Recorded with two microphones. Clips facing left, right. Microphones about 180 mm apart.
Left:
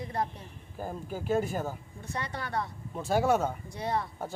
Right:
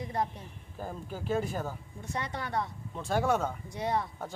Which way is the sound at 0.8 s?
5° left (ahead or behind).